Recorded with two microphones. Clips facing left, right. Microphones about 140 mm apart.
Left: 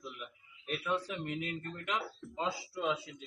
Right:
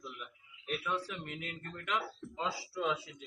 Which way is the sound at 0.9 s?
20° left (ahead or behind).